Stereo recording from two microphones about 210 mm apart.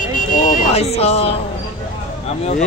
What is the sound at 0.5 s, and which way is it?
Speech, 30° left (ahead or behind).